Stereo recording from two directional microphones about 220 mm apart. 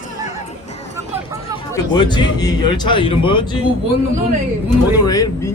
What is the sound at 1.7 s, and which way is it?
Speech, 20° left (ahead or behind).